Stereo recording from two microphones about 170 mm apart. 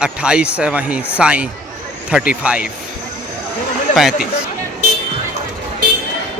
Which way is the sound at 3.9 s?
5° right (ahead or behind).